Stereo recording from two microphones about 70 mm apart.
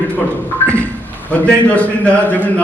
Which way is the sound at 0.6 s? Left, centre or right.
Left.